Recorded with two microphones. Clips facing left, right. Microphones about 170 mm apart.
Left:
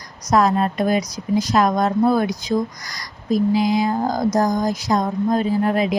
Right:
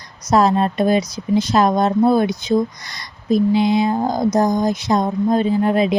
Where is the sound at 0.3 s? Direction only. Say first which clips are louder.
Right 2 dB; 25° right (ahead or behind).